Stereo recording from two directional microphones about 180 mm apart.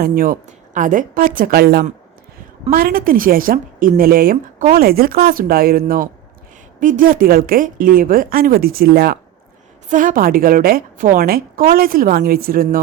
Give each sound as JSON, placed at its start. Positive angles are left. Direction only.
{"t": 0.0, "sound": "a woman's voice", "side_deg": -55}